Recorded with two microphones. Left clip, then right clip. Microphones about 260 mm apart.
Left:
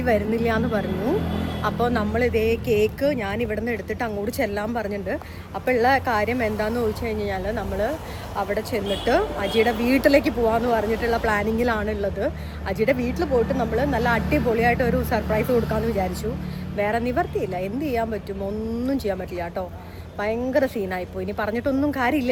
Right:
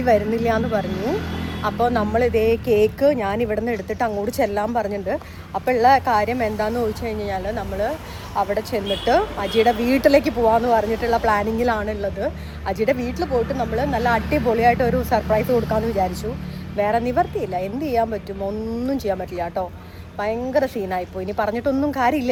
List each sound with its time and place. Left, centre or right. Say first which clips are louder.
0.0 s speech: right 4 dB; centre